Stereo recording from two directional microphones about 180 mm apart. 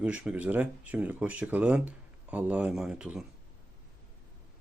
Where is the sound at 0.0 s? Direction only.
10° right (ahead or behind).